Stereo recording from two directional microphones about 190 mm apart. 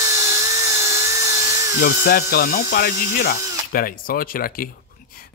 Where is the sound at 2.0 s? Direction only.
50° left (ahead or behind).